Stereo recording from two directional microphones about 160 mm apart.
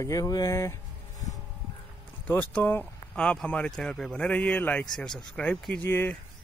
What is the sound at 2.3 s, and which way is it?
Speech, 10° left (ahead or behind).